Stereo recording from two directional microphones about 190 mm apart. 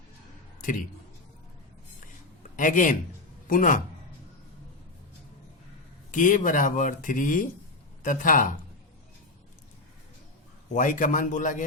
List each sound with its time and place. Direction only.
2.6 s a man's voice: 45° left (ahead or behind)
6.1 s speech: 45° left (ahead or behind)
10.7 s speech: 45° left (ahead or behind)